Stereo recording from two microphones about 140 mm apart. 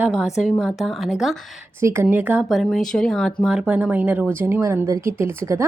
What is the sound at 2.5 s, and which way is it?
A woman's voice, centre (ahead or behind).